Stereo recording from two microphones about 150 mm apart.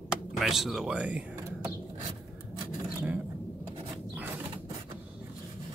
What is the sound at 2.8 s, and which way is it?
Zipper, 10° right (ahead or behind).